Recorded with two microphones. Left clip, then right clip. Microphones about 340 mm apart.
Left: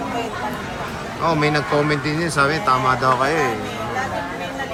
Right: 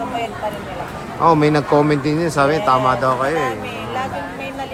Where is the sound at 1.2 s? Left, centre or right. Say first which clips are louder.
Right 5 dB; centre.